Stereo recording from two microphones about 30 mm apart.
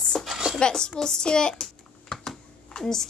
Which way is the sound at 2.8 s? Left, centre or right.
Centre.